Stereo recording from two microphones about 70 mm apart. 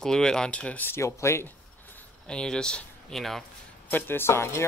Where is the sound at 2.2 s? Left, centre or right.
Centre.